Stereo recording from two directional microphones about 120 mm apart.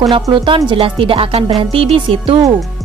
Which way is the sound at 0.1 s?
45° right (ahead or behind).